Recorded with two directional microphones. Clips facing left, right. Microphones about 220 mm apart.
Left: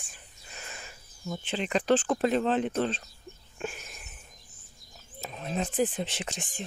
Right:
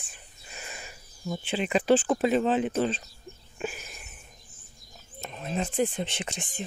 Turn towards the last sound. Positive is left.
turn(degrees=0)  # may be behind; listen again after turning